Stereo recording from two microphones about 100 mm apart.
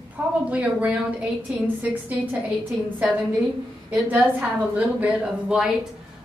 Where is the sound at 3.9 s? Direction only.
15° right (ahead or behind).